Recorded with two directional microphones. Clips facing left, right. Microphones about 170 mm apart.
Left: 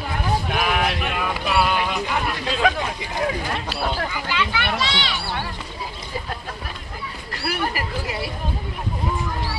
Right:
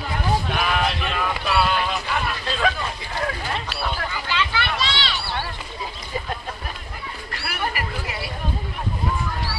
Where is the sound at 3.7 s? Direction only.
35° left (ahead or behind).